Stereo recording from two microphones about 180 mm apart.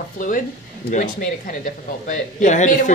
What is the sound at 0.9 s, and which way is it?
Speech, 50° left (ahead or behind).